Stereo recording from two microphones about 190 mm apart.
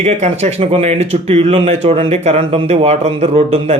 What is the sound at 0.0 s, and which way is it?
Speech, 35° right (ahead or behind).